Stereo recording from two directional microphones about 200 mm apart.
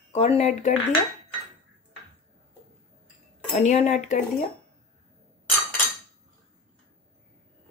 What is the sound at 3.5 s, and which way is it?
Speech, 35° left (ahead or behind).